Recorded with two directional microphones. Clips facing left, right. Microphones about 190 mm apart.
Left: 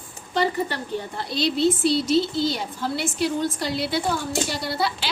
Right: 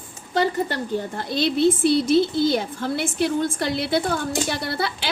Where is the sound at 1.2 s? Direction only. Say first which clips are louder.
Right 1 dB; 50° right (ahead or behind).